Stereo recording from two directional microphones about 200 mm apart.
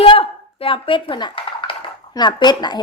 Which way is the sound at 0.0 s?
30° left (ahead or behind).